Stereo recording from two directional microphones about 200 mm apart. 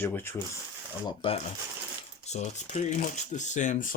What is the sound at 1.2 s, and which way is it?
Speech, 25° left (ahead or behind).